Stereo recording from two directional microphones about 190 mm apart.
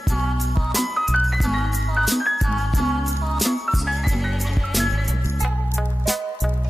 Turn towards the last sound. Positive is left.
turn(degrees=0)  # may be behind; listen again after turning